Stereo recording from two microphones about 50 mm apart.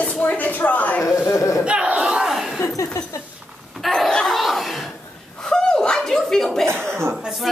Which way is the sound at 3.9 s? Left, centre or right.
Centre.